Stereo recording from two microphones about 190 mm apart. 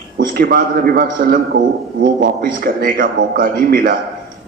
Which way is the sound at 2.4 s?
50° right (ahead or behind).